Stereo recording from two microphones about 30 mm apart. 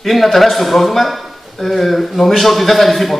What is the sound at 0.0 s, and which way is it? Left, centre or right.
Speech, centre.